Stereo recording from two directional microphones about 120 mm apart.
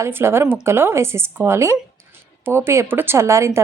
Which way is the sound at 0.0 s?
20° right (ahead or behind).